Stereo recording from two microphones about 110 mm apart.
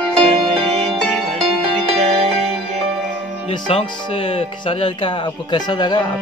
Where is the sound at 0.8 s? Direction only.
Centre (ahead or behind).